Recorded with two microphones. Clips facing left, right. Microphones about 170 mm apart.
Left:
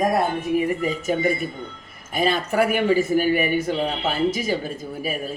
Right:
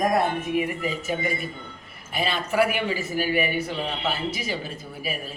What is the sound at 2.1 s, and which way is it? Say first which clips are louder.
Speech: left 4 dB; 45° left (ahead or behind).